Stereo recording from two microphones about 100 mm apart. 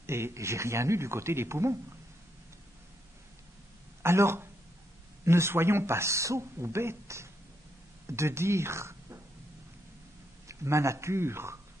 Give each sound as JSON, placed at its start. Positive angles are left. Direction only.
{"t": 0.0, "sound": "a man's voice", "side_deg": -25}
{"t": 4.0, "sound": "a man's voice", "side_deg": -25}
{"t": 10.5, "sound": "a man's voice", "side_deg": -30}